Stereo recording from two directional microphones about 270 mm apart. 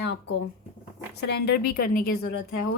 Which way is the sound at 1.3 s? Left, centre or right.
Left.